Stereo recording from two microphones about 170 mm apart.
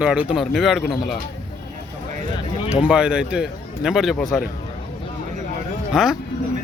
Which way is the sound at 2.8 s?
5° right (ahead or behind).